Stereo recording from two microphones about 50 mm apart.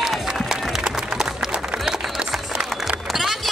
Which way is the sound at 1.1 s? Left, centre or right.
Centre.